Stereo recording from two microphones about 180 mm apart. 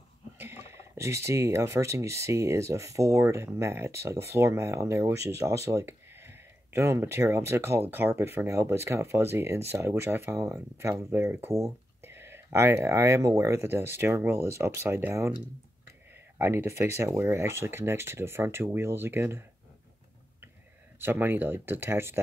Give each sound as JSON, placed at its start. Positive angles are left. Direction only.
{"t": 0.4, "sound": "speech", "side_deg": -15}
{"t": 16.3, "sound": "speech", "side_deg": -15}
{"t": 21.0, "sound": "speech", "side_deg": -10}